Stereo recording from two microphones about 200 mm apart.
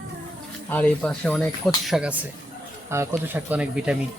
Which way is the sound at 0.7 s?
10° left (ahead or behind).